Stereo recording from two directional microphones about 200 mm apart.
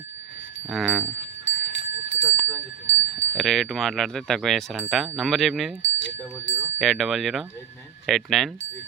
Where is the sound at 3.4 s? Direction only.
Centre (ahead or behind).